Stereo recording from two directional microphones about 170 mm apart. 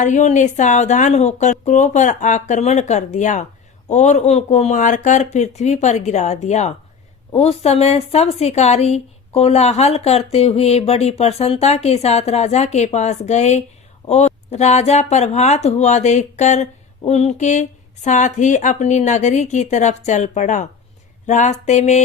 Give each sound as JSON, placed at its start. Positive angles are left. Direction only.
{"t": 0.0, "sound": "speech", "side_deg": 45}